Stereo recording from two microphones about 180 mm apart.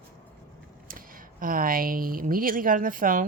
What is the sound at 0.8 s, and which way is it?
Speech, 50° right (ahead or behind).